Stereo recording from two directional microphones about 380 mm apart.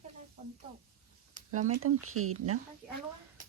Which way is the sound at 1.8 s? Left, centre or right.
Right.